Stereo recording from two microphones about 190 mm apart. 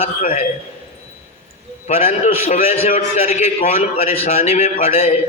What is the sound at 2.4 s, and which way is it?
A man's voice, 35° left (ahead or behind).